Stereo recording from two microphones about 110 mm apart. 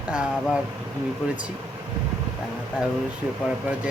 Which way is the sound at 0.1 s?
10° right (ahead or behind).